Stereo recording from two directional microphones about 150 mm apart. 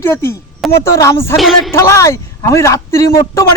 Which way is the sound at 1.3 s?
Centre (ahead or behind).